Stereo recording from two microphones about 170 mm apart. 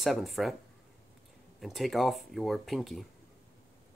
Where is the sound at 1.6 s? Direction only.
Centre (ahead or behind).